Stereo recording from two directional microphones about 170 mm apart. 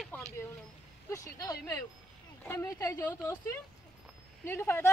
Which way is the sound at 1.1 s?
20° left (ahead or behind).